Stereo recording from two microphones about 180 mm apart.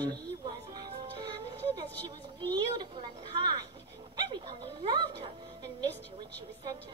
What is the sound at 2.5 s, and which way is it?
A child's voice, 25° right (ahead or behind).